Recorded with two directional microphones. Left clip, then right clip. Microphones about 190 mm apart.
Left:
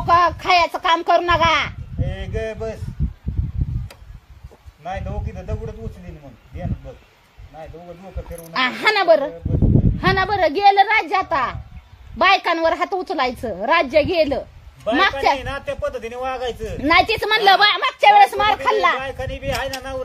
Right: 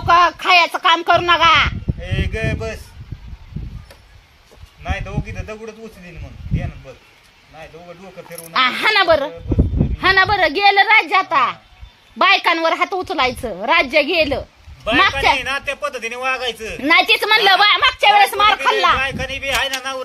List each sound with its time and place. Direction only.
0.0 s speech: 10° right (ahead or behind)
2.0 s a sound: 15° left (ahead or behind)
4.8 s a man's voice: 15° left (ahead or behind)
8.5 s a woman's voice: 5° right (ahead or behind)
14.8 s speech: 20° left (ahead or behind)
16.8 s a woman's voice: 5° right (ahead or behind)
19.0 s speech: 20° left (ahead or behind)